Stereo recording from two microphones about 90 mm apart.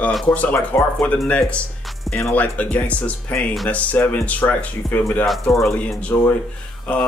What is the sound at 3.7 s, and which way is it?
Speech, 15° left (ahead or behind).